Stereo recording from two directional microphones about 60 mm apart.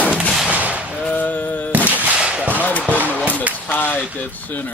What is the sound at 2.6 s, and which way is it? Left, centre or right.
Basketball bounce, left.